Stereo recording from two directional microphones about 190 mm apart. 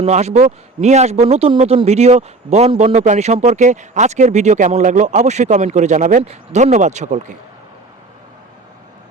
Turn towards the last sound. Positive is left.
turn(degrees=-40)  # may be behind; listen again after turning